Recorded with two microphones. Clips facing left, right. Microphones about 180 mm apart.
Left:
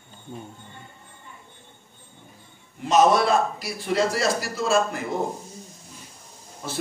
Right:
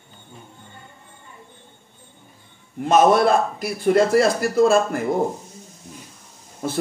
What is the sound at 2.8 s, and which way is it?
A man's voice, 55° right (ahead or behind).